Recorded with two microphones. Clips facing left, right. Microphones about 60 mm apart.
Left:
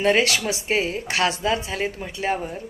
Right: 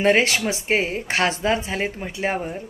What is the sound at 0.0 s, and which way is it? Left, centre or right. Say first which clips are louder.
A woman's voice: right 1 dB; right.